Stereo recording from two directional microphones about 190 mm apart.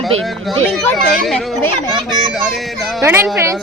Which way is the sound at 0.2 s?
Centre (ahead or behind).